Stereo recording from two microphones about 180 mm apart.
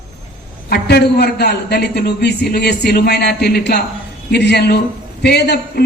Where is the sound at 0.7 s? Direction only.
65° left (ahead or behind).